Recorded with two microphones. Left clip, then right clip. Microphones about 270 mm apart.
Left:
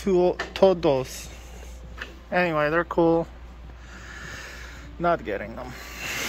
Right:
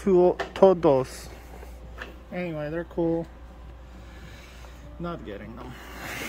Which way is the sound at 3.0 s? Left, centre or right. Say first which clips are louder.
Left 5 dB; left.